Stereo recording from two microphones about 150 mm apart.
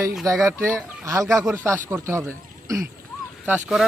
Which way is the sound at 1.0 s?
20° right (ahead or behind).